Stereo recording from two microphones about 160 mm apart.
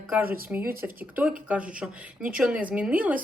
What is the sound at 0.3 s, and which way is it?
Speech, 65° right (ahead or behind).